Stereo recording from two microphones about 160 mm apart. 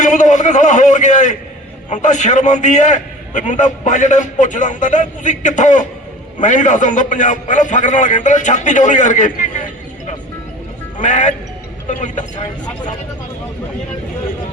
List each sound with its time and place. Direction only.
0.0 s a man's voice: 50° left (ahead or behind)
10.9 s a man's voice: 50° left (ahead or behind)